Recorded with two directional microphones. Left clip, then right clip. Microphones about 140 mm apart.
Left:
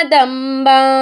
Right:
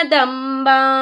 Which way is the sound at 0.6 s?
35° left (ahead or behind).